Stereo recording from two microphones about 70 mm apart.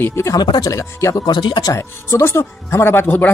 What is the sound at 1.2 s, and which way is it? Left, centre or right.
Speech, left.